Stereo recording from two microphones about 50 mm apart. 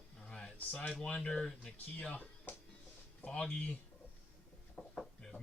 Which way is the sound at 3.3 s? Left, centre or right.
Left.